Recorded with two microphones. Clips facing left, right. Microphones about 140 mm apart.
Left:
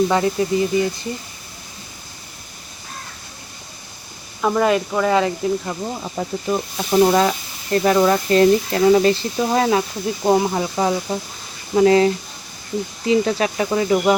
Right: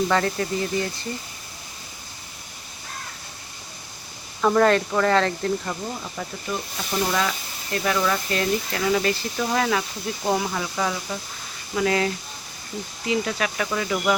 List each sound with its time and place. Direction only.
0.1 s speech: 15° left (ahead or behind)
4.4 s speech: 10° left (ahead or behind)
5.9 s speech: 30° left (ahead or behind)